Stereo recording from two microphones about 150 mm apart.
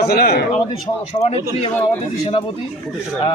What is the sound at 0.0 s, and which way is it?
Speech, 90° left.